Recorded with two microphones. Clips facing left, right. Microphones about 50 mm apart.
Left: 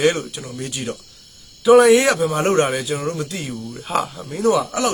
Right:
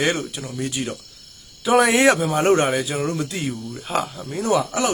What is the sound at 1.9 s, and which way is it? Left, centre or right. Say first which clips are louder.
Speech: left 1 dB; right.